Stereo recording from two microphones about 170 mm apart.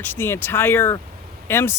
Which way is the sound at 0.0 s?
10° left (ahead or behind).